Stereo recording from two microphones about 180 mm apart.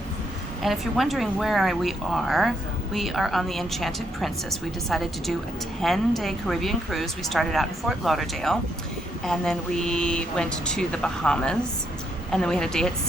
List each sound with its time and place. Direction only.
0.6 s a woman's voice: centre (ahead or behind)